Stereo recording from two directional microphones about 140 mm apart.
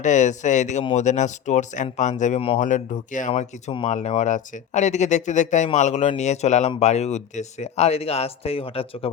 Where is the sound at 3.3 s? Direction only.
55° left (ahead or behind).